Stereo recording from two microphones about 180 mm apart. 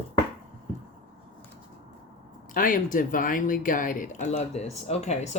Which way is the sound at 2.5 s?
50° left (ahead or behind).